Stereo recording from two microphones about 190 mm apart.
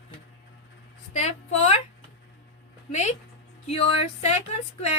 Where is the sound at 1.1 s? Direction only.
35° left (ahead or behind).